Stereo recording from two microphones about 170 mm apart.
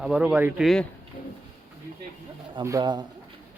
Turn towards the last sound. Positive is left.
turn(degrees=-25)  # may be behind; listen again after turning